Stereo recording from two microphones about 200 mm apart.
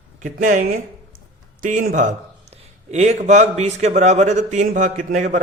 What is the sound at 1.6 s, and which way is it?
Speech, 40° right (ahead or behind).